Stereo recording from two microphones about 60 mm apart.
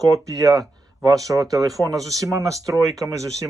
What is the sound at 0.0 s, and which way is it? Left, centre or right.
Speech, right.